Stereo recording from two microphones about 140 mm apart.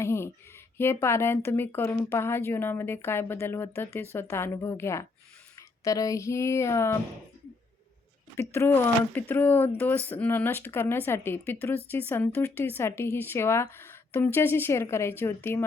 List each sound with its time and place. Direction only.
0.0 s a sound: 20° left (ahead or behind)
0.8 s a woman's voice: 20° left (ahead or behind)
8.4 s speech: 15° left (ahead or behind)